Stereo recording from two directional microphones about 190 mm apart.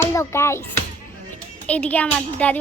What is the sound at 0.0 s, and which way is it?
A child's voice, 15° left (ahead or behind).